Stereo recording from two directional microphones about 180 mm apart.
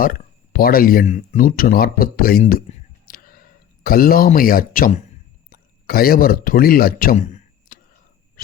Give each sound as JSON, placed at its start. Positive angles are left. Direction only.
{"t": 0.0, "sound": "speech", "side_deg": 55}
{"t": 2.7, "sound": "clicking", "side_deg": 40}
{"t": 3.1, "sound": "a sound", "side_deg": 55}
{"t": 5.5, "sound": "speech", "side_deg": 55}